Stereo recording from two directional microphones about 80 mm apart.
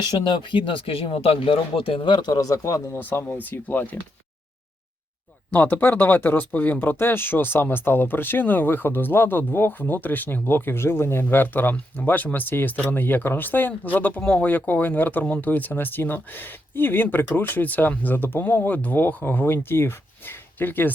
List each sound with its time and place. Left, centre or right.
0.0 s speech: left
2.3 s speech: left
3.0 s speech: left
5.5 s speech: left